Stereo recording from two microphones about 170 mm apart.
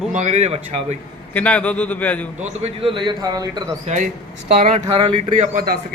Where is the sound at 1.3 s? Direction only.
10° left (ahead or behind).